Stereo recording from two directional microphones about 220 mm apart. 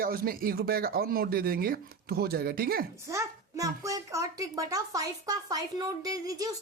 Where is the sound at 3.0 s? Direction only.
15° right (ahead or behind).